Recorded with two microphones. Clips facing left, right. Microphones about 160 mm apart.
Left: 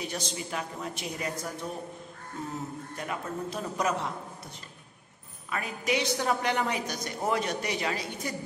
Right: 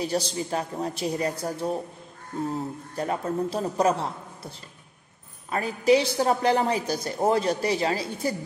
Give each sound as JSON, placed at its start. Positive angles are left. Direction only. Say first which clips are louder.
{"t": 0.0, "sound": "a woman's voice", "louder": "right 8 dB", "side_deg": -35}
{"t": 3.0, "sound": "a woman's voice", "louder": "right 9 dB", "side_deg": -35}